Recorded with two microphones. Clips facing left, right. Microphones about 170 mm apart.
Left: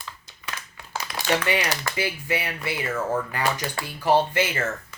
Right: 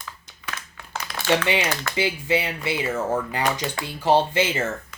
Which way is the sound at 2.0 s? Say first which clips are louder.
Right 7 dB; 25° right (ahead or behind).